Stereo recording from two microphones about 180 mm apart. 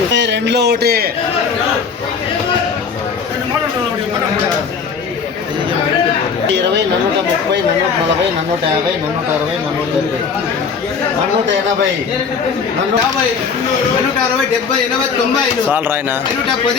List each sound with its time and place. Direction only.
0.1 s a man's voice: 75° right (ahead or behind); by 1.1 s 60° right (ahead or behind)
15.7 s speech: 10° right (ahead or behind)